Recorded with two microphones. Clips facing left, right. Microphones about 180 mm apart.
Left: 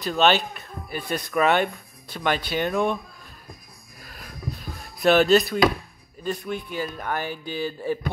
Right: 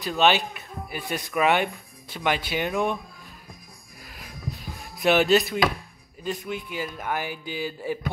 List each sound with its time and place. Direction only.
0.2 s speech: 15° right (ahead or behind)
4.0 s a sound: 15° right (ahead or behind)
5.0 s speech: 15° right (ahead or behind)